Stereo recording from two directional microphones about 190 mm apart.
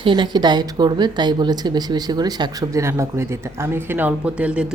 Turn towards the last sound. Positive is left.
turn(degrees=-5)  # may be behind; listen again after turning